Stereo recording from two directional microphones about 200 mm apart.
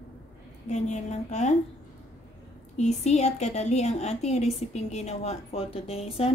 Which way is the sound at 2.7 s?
35° left (ahead or behind).